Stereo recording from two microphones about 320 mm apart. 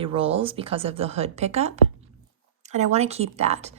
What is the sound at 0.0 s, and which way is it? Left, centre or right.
A woman's voice, centre.